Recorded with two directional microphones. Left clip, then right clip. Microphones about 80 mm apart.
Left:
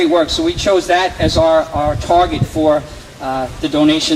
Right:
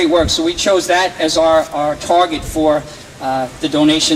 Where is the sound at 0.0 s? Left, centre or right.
Right.